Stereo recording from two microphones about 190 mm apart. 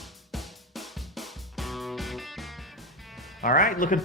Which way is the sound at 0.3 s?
Centre (ahead or behind).